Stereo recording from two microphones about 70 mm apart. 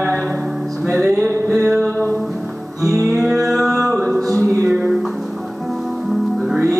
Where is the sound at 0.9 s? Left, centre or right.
Centre.